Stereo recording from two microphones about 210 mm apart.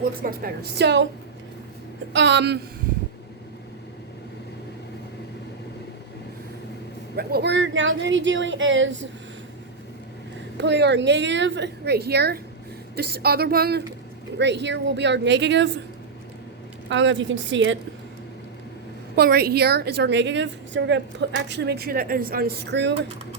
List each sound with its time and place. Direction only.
0.0 s a woman's voice: 45° right (ahead or behind)
2.1 s speech: 55° right (ahead or behind)
7.2 s speech: 45° right (ahead or behind)
10.6 s a woman's voice: 55° right (ahead or behind)
16.9 s speech: 60° right (ahead or behind)
19.1 s a woman's voice: 50° right (ahead or behind)